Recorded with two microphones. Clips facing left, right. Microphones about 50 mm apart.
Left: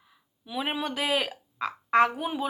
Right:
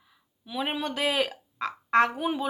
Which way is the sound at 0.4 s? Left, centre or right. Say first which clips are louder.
Even; centre.